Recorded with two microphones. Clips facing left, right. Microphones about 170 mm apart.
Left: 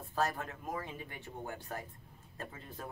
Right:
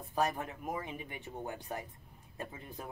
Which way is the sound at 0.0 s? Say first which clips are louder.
Right 2 dB; 15° right (ahead or behind).